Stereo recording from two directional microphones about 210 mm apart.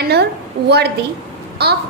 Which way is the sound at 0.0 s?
50° right (ahead or behind).